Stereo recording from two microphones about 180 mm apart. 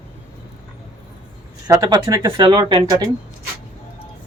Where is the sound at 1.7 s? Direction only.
20° right (ahead or behind).